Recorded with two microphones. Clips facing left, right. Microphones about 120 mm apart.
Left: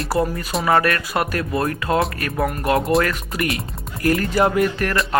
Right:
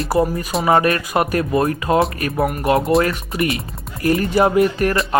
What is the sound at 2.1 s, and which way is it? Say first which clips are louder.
Speech: right 3 dB; 25° right (ahead or behind).